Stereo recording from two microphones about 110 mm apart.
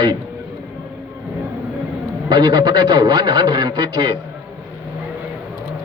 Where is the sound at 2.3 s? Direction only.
45° right (ahead or behind).